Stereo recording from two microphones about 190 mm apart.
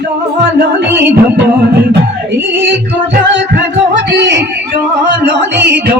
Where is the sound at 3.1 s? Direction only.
65° right (ahead or behind).